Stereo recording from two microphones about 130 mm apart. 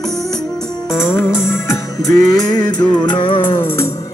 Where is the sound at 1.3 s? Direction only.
20° left (ahead or behind).